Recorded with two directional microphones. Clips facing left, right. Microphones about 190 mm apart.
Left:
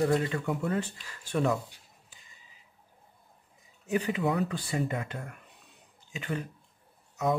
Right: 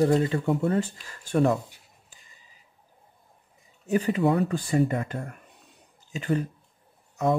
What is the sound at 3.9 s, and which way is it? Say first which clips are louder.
Speech: right 5 dB; 40° right (ahead or behind).